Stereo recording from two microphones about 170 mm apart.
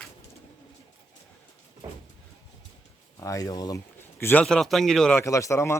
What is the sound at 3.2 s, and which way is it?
Speech, 20° left (ahead or behind).